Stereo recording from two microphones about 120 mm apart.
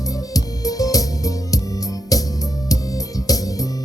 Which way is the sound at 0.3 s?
30° left (ahead or behind).